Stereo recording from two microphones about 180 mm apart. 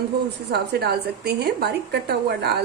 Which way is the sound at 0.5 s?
65° right (ahead or behind).